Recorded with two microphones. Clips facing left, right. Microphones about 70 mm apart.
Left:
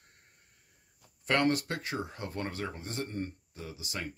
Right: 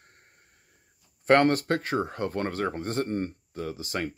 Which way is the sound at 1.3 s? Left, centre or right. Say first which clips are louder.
Right 8 dB; right.